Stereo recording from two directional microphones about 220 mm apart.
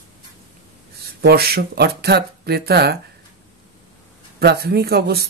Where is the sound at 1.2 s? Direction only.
45° right (ahead or behind).